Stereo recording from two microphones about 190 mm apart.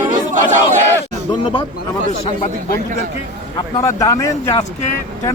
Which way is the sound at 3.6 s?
20° left (ahead or behind).